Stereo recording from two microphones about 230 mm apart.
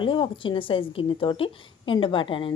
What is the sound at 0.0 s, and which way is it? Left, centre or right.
A woman's voice, left.